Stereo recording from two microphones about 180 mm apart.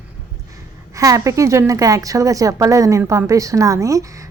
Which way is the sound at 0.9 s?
15° right (ahead or behind).